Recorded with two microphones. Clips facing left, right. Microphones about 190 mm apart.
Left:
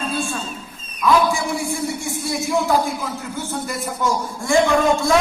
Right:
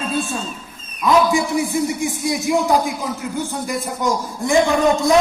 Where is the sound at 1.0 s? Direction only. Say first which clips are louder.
Right 2 dB; 20° right (ahead or behind).